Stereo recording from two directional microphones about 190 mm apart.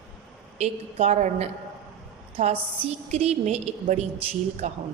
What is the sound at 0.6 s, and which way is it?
A man's voice, 40° right (ahead or behind).